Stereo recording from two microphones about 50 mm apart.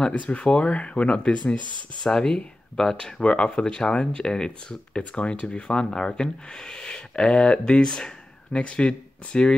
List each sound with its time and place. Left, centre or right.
0.0 s speech: left